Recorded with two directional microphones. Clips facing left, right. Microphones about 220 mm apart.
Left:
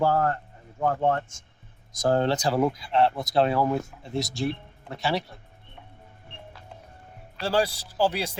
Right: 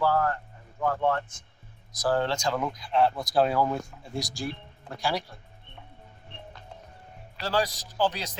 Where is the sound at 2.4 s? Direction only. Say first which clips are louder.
Left 5 dB; 35° left (ahead or behind).